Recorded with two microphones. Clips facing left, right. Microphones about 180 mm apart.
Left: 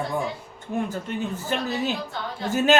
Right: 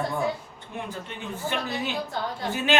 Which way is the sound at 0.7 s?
45° left (ahead or behind).